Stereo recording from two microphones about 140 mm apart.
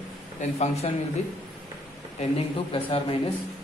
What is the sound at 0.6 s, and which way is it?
Speech, 50° left (ahead or behind).